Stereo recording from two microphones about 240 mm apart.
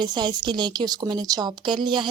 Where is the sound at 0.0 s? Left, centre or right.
Centre.